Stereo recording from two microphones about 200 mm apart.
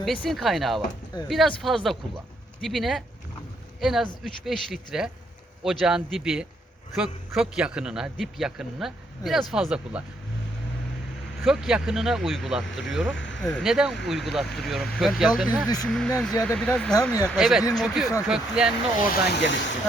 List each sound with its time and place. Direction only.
0.0 s a man's voice: centre (ahead or behind)
11.4 s a man's voice: centre (ahead or behind)
13.1 s speech: 65° left (ahead or behind)
13.4 s a man's voice: centre (ahead or behind)
18.9 s speech: 50° left (ahead or behind)